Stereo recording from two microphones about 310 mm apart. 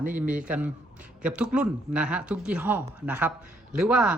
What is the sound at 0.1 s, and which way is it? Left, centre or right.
Speech, centre.